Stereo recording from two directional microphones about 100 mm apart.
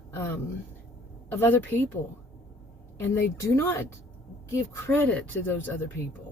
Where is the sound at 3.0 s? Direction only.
25° left (ahead or behind).